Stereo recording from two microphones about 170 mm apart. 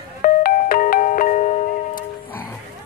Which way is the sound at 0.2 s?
55° left (ahead or behind).